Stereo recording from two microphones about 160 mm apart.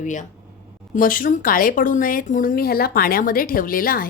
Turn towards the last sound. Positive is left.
turn(degrees=60)  # may be behind; listen again after turning